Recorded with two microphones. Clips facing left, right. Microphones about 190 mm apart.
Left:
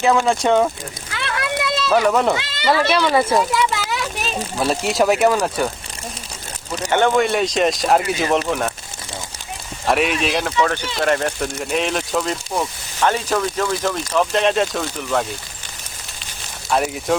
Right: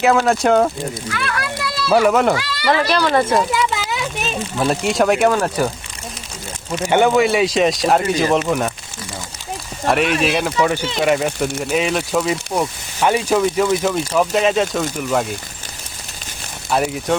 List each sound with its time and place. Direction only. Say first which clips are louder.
0.0 s speech: right 2 dB; 5° right (ahead or behind)
1.1 s a sound: even; 25° left (ahead or behind)
1.9 s speech: right 3 dB; 10° right (ahead or behind)
2.3 s speech: right 1 dB; 25° left (ahead or behind)
2.7 s a child's voice: even; centre (ahead or behind)
6.8 s speech: right 2 dB; 10° right (ahead or behind)
9.8 s speech: right 2 dB; centre (ahead or behind)
16.6 s speech: right 1 dB; centre (ahead or behind)